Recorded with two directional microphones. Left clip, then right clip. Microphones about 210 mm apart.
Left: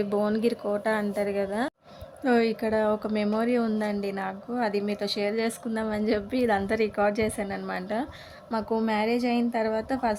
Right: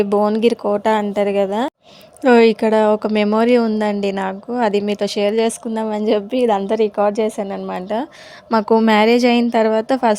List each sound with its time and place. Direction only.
0.0 s a woman's voice: 25° right (ahead or behind)